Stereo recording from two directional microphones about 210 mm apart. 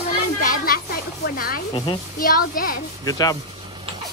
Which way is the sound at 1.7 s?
20° left (ahead or behind).